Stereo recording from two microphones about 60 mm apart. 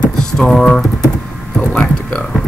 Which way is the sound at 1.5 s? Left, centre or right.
Centre.